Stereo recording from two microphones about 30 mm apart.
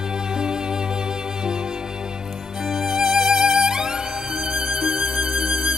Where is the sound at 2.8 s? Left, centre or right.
Centre.